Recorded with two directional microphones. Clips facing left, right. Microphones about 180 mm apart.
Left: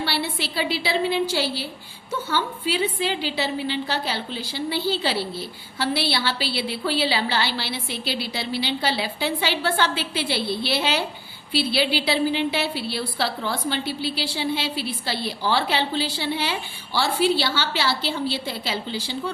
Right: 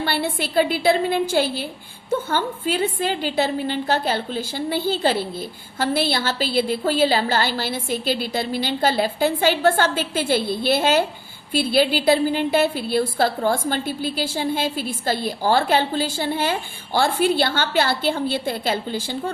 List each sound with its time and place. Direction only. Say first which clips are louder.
0.0 s a woman's voice: right 3 dB; 50° right (ahead or behind)